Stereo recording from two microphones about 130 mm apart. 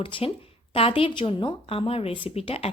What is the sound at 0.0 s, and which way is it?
A woman's voice, 45° left (ahead or behind).